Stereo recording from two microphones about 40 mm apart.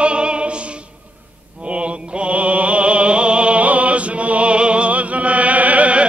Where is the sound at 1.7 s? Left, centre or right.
Right.